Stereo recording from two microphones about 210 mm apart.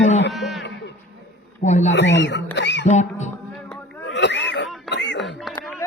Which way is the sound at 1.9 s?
60° left (ahead or behind).